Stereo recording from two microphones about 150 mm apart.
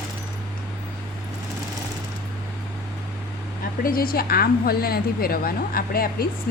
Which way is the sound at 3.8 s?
75° left (ahead or behind).